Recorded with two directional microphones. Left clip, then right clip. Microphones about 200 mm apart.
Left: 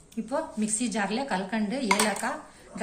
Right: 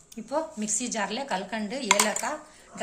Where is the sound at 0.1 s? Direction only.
45° right (ahead or behind).